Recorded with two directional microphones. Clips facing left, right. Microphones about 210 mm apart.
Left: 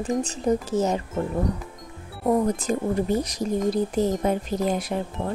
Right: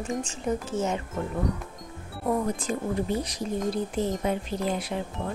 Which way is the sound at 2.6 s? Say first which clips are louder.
Left 4 dB; 40° left (ahead or behind).